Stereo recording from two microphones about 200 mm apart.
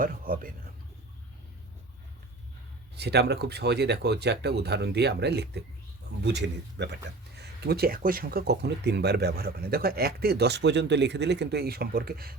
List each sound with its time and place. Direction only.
0.0 s speech: 45° right (ahead or behind)
2.9 s speech: 55° right (ahead or behind)